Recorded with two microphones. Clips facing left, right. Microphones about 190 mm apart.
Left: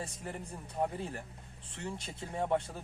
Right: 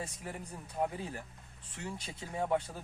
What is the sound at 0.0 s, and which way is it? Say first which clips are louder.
Speech: left 1 dB; 5° right (ahead or behind).